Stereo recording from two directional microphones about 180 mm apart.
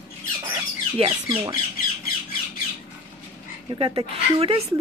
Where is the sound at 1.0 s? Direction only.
30° right (ahead or behind).